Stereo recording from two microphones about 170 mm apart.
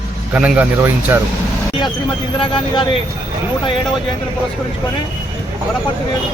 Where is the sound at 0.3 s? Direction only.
5° right (ahead or behind).